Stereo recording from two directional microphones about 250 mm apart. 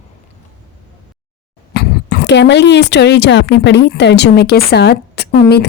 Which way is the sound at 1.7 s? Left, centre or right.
Left.